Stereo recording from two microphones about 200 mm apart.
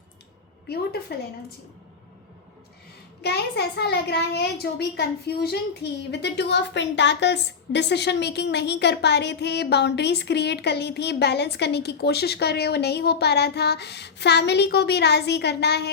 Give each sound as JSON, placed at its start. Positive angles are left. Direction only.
{"t": 1.1, "sound": "a woman's voice", "side_deg": 55}
{"t": 3.2, "sound": "a child's voice", "side_deg": 55}